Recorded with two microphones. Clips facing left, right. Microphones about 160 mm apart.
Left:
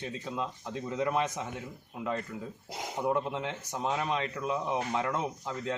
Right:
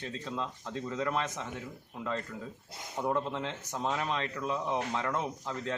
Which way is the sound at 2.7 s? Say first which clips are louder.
Left 8 dB; 90° left.